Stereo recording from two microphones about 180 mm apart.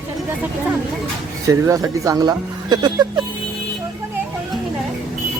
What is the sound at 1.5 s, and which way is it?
Speech, 20° right (ahead or behind).